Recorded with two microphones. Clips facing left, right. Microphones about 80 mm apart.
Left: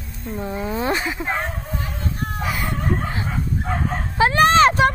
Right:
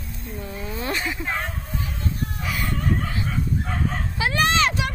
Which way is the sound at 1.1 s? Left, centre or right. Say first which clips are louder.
Left 3 dB; left.